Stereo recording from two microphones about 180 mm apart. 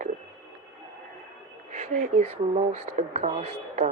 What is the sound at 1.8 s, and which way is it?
Speech, 40° right (ahead or behind).